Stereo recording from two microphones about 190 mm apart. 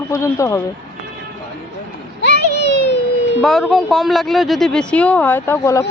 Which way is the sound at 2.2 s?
65° left (ahead or behind).